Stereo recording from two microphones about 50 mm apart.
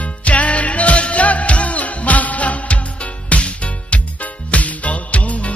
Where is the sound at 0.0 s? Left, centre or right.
Left.